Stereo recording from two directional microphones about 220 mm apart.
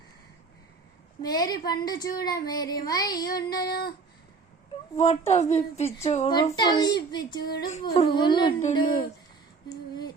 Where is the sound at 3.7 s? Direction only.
45° left (ahead or behind).